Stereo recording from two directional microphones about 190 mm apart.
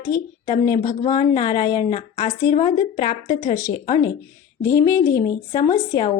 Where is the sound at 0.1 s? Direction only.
20° left (ahead or behind).